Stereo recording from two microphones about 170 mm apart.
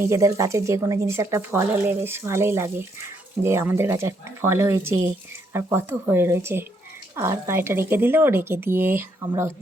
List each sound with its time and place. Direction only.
0.0 s a woman's voice: 15° right (ahead or behind)